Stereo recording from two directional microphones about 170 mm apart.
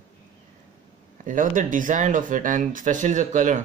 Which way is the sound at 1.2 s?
50° right (ahead or behind).